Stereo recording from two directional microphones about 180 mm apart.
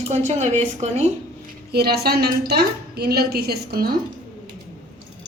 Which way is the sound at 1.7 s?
60° right (ahead or behind).